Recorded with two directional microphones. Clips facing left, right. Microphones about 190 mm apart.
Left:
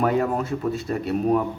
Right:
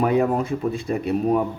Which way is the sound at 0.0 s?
15° right (ahead or behind).